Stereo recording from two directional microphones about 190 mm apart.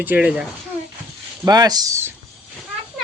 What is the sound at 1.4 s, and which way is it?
Speech, 20° right (ahead or behind).